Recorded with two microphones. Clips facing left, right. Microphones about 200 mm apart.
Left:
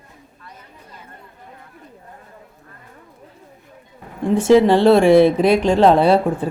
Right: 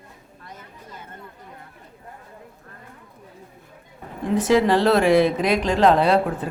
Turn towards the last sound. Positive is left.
turn(degrees=30)  # may be behind; listen again after turning